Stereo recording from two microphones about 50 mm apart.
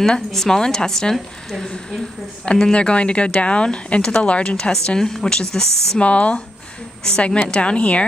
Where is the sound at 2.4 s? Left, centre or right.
Left.